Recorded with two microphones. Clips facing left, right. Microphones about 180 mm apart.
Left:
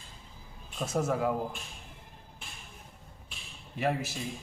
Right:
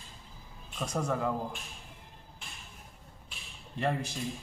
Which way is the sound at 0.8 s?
5° left (ahead or behind).